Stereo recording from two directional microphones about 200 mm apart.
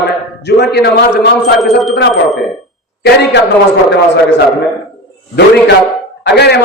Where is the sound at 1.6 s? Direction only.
Centre (ahead or behind).